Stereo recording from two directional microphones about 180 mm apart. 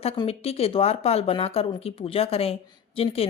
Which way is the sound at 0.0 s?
35° left (ahead or behind).